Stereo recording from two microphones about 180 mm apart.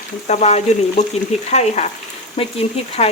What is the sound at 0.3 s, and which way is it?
Speech, 40° left (ahead or behind).